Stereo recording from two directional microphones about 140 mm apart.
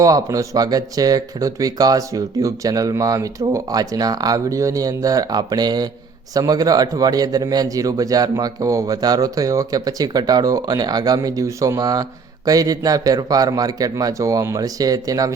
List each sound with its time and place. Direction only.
0.0 s speech: 25° right (ahead or behind)